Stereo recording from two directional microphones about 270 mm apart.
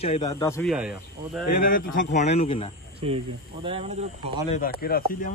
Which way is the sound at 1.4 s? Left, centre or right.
Left.